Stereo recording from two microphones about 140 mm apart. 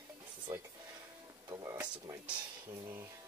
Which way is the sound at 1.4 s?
25° right (ahead or behind).